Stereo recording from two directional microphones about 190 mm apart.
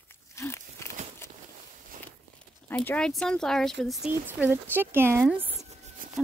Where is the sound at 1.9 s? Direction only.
45° right (ahead or behind).